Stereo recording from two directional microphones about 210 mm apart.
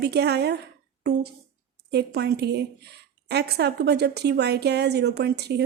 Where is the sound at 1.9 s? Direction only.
50° right (ahead or behind).